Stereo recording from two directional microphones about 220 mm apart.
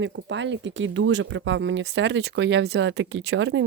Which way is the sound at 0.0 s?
55° right (ahead or behind).